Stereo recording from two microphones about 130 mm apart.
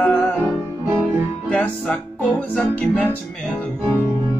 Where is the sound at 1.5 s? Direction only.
5° left (ahead or behind).